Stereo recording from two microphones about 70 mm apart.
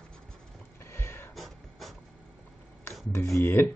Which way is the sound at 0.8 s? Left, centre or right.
Left.